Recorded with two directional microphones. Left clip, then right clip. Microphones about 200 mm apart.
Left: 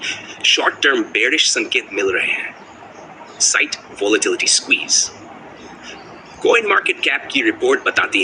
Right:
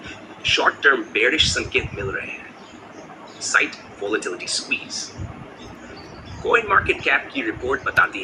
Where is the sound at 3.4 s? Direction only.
55° left (ahead or behind).